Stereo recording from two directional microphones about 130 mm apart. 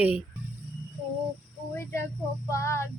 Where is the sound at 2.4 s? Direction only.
20° left (ahead or behind).